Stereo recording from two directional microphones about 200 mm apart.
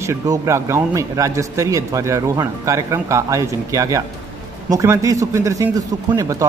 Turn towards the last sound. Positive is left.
turn(degrees=-15)  # may be behind; listen again after turning